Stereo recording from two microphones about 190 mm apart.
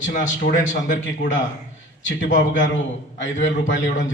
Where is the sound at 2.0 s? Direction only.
80° left.